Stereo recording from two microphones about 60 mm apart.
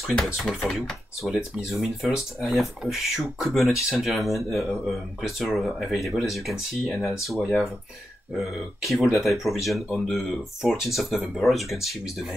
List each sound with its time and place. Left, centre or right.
0.2 s speech: centre